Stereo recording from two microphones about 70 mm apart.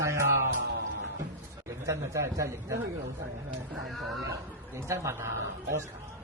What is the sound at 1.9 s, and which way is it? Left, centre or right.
Speech, right.